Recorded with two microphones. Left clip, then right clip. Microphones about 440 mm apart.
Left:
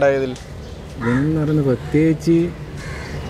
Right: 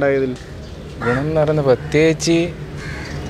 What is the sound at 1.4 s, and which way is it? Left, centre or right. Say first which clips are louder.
A man's voice: right 5 dB; right.